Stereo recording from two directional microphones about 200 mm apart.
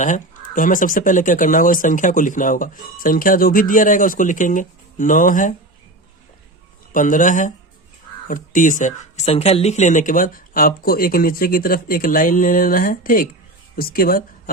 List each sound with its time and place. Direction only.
0.0 s speech: 40° left (ahead or behind)
6.9 s speech: 40° left (ahead or behind)